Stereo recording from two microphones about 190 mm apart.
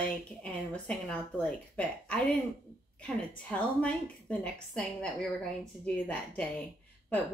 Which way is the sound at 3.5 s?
5° left (ahead or behind).